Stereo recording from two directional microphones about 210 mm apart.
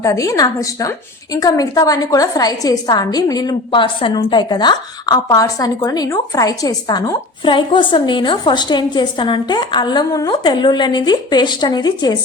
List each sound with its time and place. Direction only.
0.0 s a woman's voice: 15° left (ahead or behind)